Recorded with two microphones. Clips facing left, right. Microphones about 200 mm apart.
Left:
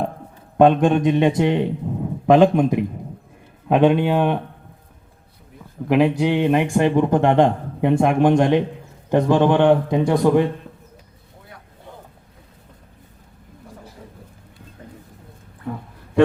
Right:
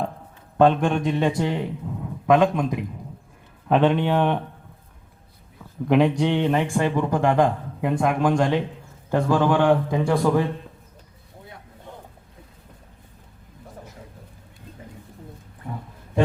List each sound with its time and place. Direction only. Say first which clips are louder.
0.5 s a man's voice: left 4 dB; 20° left (ahead or behind)
3.7 s a man's voice: left 3 dB; 15° left (ahead or behind)
5.9 s a man's voice: left 2 dB; 5° left (ahead or behind)